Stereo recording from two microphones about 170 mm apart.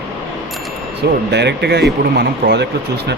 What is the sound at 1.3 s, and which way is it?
Speech, 80° right.